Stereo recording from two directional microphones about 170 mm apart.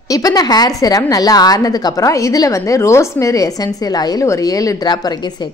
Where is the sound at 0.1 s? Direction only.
20° left (ahead or behind).